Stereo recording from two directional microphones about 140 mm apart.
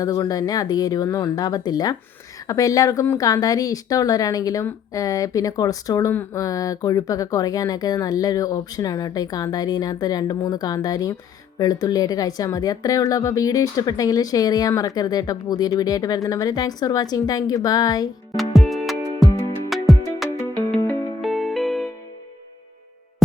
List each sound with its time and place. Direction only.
0.0 s speech: 25° left (ahead or behind)
18.3 s music: centre (ahead or behind)
20.7 s music: 15° left (ahead or behind)
21.2 s music: centre (ahead or behind)